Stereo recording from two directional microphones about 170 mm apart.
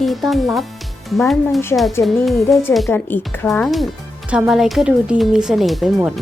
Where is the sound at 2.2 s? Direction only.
Centre (ahead or behind).